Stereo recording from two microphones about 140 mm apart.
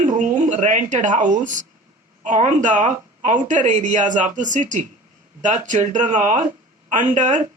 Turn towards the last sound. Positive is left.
turn(degrees=-60)  # may be behind; listen again after turning